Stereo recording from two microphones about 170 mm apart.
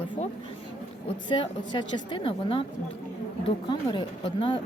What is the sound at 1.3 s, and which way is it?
Speech, 30° left (ahead or behind).